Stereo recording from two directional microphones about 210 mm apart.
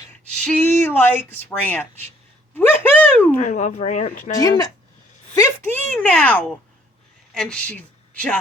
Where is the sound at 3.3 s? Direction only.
35° left (ahead or behind).